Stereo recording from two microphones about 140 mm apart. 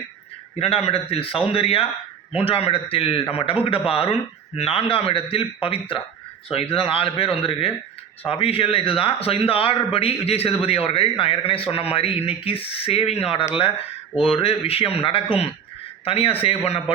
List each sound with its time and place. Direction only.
0.6 s a man's voice: 45° left (ahead or behind)